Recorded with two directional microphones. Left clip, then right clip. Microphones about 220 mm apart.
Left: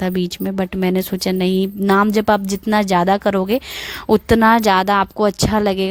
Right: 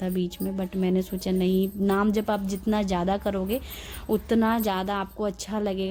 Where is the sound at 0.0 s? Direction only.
40° left (ahead or behind).